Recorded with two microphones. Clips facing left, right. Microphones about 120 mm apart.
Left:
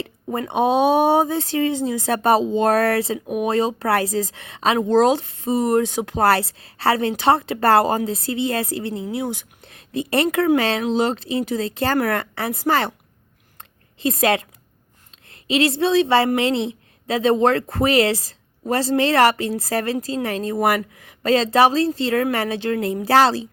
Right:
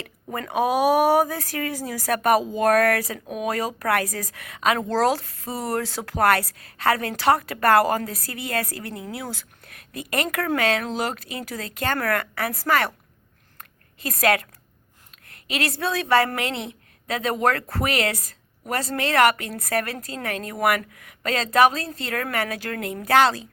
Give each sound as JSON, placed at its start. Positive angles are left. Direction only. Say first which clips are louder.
{"t": 0.0, "sound": "a woman's voice", "louder": "left 6 dB", "side_deg": 25}
{"t": 13.6, "sound": "a sound", "louder": "left 11 dB", "side_deg": 25}
{"t": 15.3, "sound": "a woman's voice", "louder": "left 8 dB", "side_deg": 25}